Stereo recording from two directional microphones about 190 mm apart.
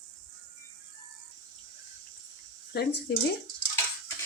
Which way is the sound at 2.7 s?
55° left (ahead or behind).